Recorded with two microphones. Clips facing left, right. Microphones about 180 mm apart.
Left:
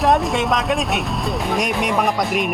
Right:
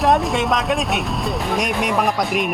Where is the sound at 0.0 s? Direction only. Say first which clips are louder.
Even; centre (ahead or behind).